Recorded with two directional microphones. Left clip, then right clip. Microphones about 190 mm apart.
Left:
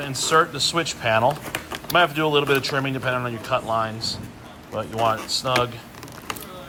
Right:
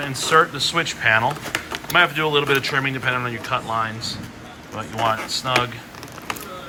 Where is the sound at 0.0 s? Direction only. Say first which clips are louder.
Right 2 dB; centre (ahead or behind).